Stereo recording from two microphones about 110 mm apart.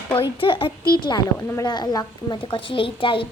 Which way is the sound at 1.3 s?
30° left (ahead or behind).